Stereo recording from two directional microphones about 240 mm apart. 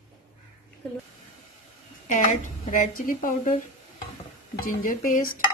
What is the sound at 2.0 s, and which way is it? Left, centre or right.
A woman's voice, left.